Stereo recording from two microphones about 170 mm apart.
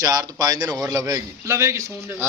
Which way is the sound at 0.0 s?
20° right (ahead or behind).